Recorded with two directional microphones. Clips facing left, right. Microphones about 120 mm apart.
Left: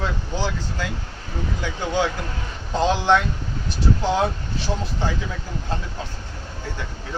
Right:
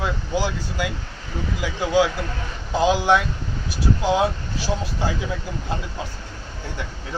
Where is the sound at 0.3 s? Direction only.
10° right (ahead or behind).